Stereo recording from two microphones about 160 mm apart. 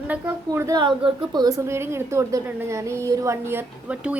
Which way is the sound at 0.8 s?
30° right (ahead or behind).